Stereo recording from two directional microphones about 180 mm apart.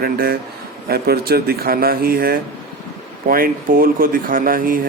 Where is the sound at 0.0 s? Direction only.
55° right (ahead or behind).